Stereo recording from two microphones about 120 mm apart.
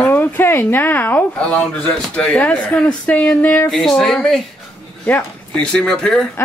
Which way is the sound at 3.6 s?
Centre (ahead or behind).